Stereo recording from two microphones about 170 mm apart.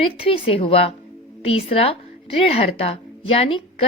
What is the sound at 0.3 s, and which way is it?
A woman's voice, 35° left (ahead or behind).